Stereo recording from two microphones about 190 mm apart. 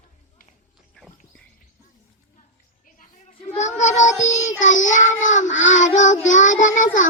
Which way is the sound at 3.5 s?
35° left (ahead or behind).